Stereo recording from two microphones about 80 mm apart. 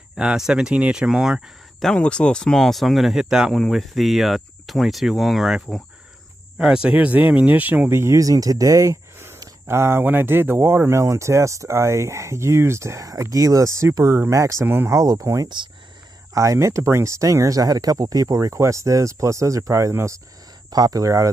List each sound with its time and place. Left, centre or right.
0.1 s speech: centre
1.8 s speech: centre; by 7.9 s right
7.9 s speech: right
9.7 s speech: right
14.0 s speech: right
14.3 s speech: right
15.0 s speech: right
15.4 s speech: right
16.3 s speech: right
20.7 s speech: right